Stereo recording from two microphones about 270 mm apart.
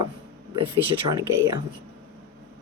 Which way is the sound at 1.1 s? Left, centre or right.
Centre.